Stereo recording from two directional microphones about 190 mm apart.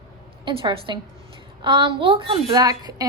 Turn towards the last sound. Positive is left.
turn(degrees=-20)  # may be behind; listen again after turning